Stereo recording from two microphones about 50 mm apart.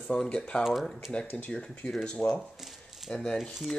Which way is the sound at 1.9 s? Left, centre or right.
Centre.